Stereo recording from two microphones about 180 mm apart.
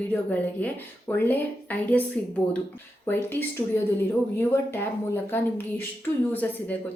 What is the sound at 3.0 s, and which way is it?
Speech, 10° left (ahead or behind).